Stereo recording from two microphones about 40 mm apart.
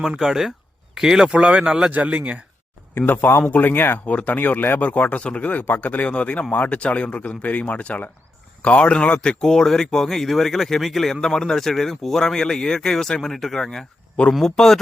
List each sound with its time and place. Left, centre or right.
0.2 s speech: centre
1.3 s speech: right
1.9 s speech: right
3.1 s speech: left
4.0 s speech: left
4.8 s speech: left
5.5 s speech: left
6.1 s speech: left
9.4 s speech: centre